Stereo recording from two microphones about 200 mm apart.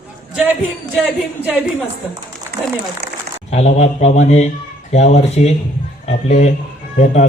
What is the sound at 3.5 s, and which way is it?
Speech, 35° left (ahead or behind).